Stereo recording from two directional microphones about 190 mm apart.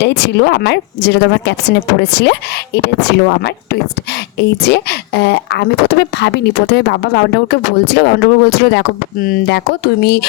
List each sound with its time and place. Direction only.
0.0 s a woman's voice: 65° left (ahead or behind)